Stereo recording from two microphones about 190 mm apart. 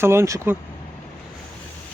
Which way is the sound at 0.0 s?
15° right (ahead or behind).